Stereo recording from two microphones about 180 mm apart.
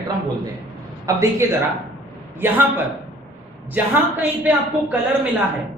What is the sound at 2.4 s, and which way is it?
Speech, 10° right (ahead or behind).